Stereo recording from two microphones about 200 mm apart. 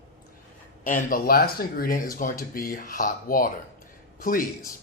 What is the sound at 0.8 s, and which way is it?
Speech, 45° left (ahead or behind).